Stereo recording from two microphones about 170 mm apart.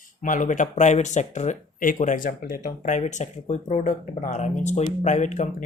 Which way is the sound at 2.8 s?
45° left (ahead or behind).